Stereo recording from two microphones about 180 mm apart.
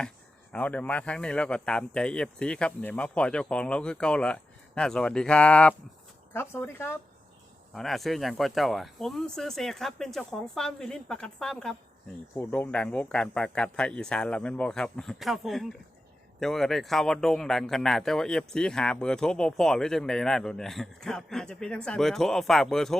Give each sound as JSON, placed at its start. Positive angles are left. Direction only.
{"t": 0.5, "sound": "speech", "side_deg": 5}
{"t": 7.7, "sound": "speech", "side_deg": 0}